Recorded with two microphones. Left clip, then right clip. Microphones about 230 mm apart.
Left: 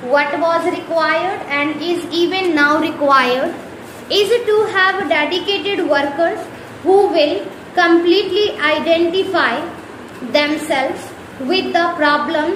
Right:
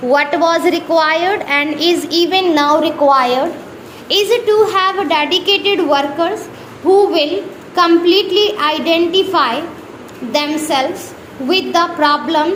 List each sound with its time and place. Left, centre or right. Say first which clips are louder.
0.1 s a woman's voice: right 2 dB; right
2.6 s a woman's voice: right 2 dB; right
4.1 s a woman's voice: right 1 dB; right